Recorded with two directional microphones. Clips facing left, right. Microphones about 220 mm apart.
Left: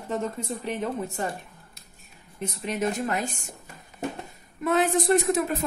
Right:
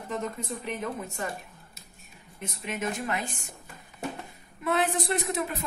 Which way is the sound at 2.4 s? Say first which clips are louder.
Left 5 dB; 40° left (ahead or behind).